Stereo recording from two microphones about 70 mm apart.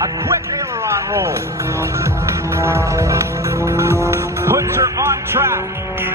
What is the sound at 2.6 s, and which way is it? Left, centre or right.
Music, right.